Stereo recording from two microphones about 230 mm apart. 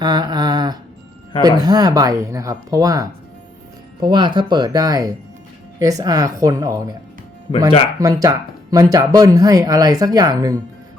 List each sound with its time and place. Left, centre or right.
0.0 s mantra: centre
1.4 s speech: centre
7.5 s speech: left
7.9 s speech: centre